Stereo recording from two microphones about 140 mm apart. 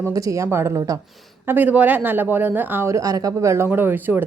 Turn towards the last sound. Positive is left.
turn(degrees=-15)  # may be behind; listen again after turning